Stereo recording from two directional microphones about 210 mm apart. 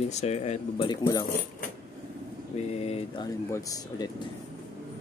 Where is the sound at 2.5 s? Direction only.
30° left (ahead or behind).